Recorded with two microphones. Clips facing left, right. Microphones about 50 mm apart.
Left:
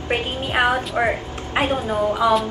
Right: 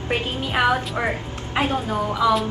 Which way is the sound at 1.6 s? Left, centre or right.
Left.